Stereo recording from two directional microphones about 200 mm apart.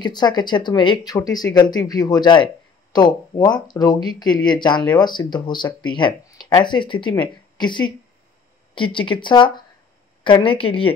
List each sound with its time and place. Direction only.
0.0 s speech: 20° left (ahead or behind)